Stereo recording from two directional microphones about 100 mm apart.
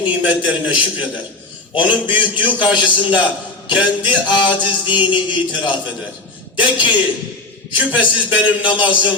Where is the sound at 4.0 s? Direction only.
50° left (ahead or behind).